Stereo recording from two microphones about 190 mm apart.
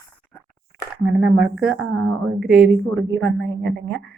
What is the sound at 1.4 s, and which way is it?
A woman's voice, centre (ahead or behind).